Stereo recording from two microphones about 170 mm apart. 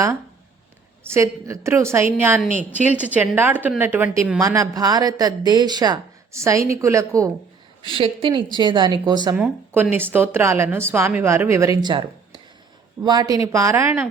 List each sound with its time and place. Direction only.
1.1 s a woman's voice: 15° right (ahead or behind)
7.8 s speech: 30° right (ahead or behind)
9.3 s a woman's voice: 5° right (ahead or behind)